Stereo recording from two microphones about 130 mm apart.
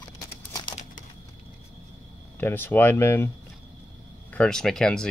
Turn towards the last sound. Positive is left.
turn(degrees=5)  # may be behind; listen again after turning